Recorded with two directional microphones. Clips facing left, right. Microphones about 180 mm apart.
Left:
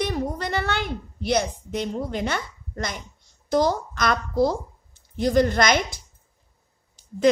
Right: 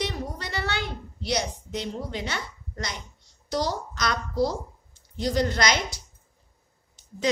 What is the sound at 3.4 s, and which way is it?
A woman's voice, 50° left (ahead or behind).